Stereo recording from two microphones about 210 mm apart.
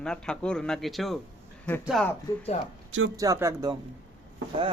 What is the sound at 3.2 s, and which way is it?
Speech, 15° right (ahead or behind).